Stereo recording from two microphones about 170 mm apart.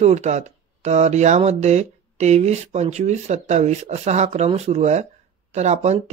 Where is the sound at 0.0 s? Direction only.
40° right (ahead or behind).